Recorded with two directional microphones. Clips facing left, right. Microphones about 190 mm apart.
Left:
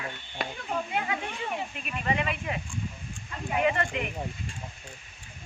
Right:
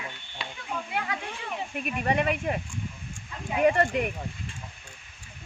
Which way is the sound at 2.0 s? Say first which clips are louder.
Right 3 dB; 50° right (ahead or behind).